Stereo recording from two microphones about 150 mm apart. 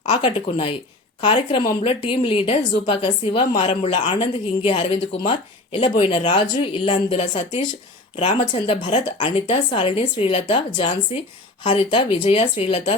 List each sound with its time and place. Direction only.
0.1 s speech: 35° left (ahead or behind)